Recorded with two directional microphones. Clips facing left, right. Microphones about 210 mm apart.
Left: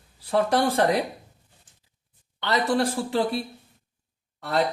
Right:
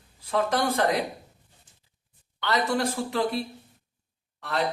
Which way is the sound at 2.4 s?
35° left (ahead or behind).